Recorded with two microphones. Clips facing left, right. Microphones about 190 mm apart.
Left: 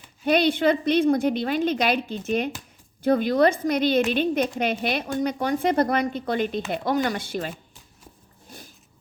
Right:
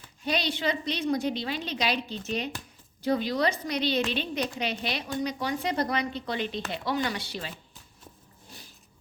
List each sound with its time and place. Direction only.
0.3 s a woman's voice: 55° left (ahead or behind)